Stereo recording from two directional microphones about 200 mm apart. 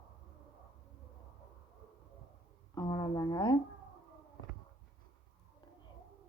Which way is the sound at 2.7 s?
20° left (ahead or behind).